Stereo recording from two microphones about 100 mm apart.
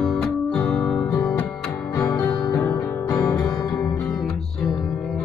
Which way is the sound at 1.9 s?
40° left (ahead or behind).